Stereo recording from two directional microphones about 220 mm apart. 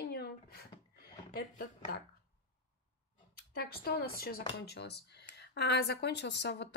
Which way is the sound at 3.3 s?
45° left (ahead or behind).